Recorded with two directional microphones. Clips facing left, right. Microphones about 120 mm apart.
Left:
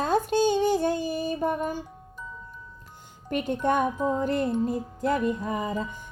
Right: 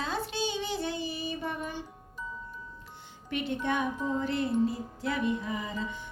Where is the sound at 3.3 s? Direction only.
45° left (ahead or behind).